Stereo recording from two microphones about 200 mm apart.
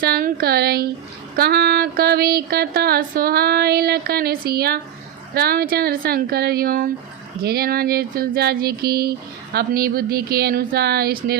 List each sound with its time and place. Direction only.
0.0 s speech: 50° right (ahead or behind)